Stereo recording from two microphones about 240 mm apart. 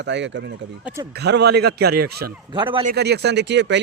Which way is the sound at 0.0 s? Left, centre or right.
Right.